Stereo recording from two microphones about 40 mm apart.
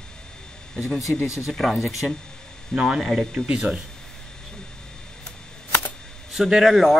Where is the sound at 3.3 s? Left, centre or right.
Right.